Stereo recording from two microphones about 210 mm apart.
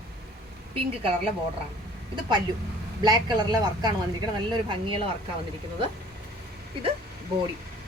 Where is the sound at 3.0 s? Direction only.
20° right (ahead or behind).